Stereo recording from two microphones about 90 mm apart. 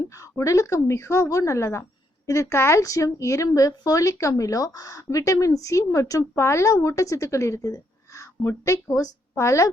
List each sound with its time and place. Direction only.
0.1 s a woman's voice: 35° left (ahead or behind)